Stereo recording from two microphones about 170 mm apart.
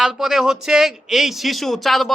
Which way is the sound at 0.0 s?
Centre (ahead or behind).